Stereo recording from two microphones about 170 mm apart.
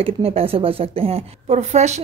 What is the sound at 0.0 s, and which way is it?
A woman's voice, 35° right (ahead or behind).